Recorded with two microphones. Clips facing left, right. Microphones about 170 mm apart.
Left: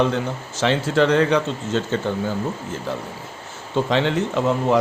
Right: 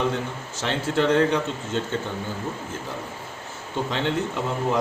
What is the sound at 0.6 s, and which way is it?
Speech, 90° left.